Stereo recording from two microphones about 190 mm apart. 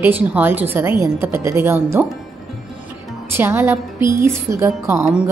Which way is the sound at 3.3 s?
10° right (ahead or behind).